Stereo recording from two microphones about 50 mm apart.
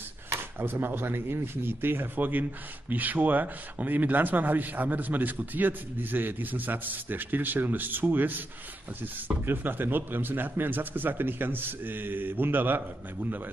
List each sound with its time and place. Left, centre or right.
0.3 s speech: right